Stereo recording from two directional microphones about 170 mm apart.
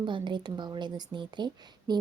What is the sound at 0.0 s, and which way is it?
Speech, 25° right (ahead or behind).